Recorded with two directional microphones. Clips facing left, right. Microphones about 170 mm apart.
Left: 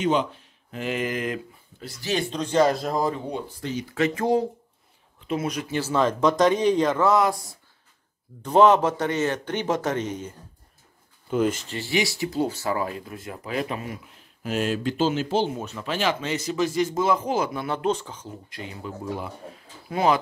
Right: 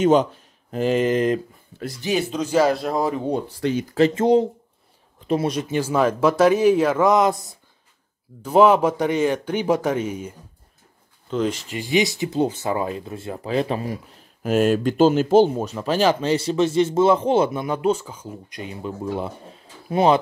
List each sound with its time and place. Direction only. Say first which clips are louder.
0.0 s speech: right 6 dB; 45° right (ahead or behind)
1.7 s speech: right 9 dB; 75° right (ahead or behind)
2.1 s speech: right 2 dB; 5° right (ahead or behind)
3.4 s speech: right 8 dB; 70° right (ahead or behind)
3.8 s speech: right 5 dB; 35° right (ahead or behind)
5.2 s speech: right 5 dB; 35° right (ahead or behind)
5.7 s speech: right 2 dB; 15° right (ahead or behind)
8.4 s speech: right 2 dB; 10° right (ahead or behind)
11.2 s speech: even; 5° left (ahead or behind)
11.7 s speech: right 5 dB; 15° right (ahead or behind)
14.4 s speech: right 7 dB; 50° right (ahead or behind); by 17.6 s 25° right (ahead or behind)
17.6 s speech: right 4 dB; 10° right (ahead or behind); by 20.2 s 25° right (ahead or behind)